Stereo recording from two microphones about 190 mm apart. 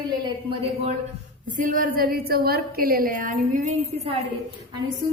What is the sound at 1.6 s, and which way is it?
A woman's voice, 45° right (ahead or behind).